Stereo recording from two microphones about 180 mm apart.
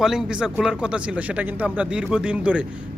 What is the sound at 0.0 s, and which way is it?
Speech, 5° right (ahead or behind).